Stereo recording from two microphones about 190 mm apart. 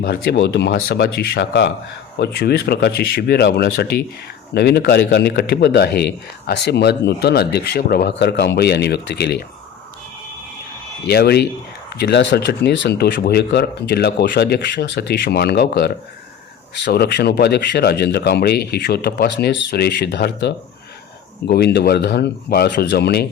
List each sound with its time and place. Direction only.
0.0 s speech: 55° left (ahead or behind)
11.0 s speech: 60° left (ahead or behind)